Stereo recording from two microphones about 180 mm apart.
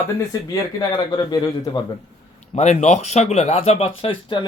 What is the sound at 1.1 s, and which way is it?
Speech, 25° left (ahead or behind).